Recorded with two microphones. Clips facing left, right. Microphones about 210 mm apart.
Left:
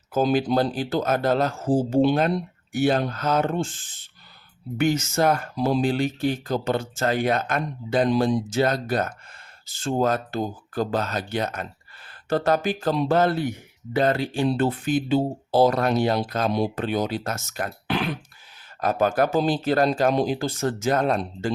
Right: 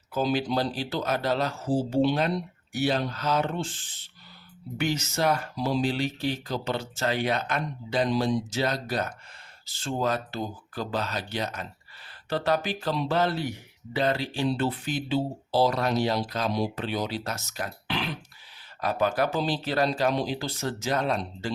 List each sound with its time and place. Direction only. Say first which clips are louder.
0.1 s speech: left 5 dB; 50° left (ahead or behind)